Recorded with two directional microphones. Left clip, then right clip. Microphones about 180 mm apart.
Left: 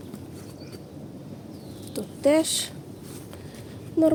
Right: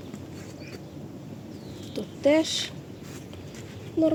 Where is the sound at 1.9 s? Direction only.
5° left (ahead or behind).